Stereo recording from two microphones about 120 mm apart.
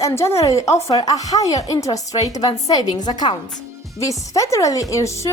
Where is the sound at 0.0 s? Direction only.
20° left (ahead or behind).